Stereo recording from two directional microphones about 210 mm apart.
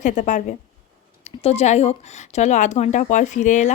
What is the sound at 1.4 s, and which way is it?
Speech, 30° left (ahead or behind).